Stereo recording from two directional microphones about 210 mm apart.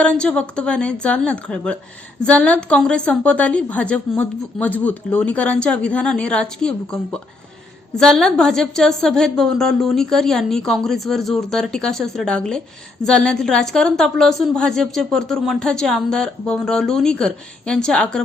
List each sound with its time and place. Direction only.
0.0 s a woman's voice: 5° left (ahead or behind)